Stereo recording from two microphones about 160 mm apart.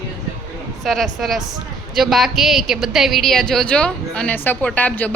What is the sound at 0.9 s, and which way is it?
Speech, centre (ahead or behind).